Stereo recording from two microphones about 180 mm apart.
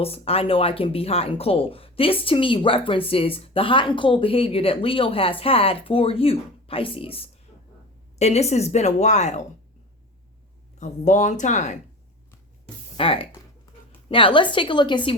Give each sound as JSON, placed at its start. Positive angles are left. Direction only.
{"t": 0.0, "sound": "speech", "side_deg": 35}
{"t": 10.8, "sound": "speech", "side_deg": 40}
{"t": 13.0, "sound": "a woman's voice", "side_deg": 30}